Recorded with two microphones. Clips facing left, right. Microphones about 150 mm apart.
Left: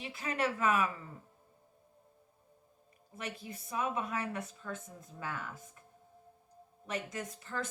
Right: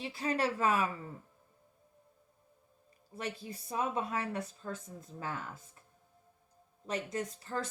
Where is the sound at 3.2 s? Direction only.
35° right (ahead or behind).